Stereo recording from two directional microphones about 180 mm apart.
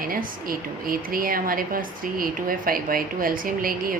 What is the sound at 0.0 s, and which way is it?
A woman's voice, 50° right (ahead or behind).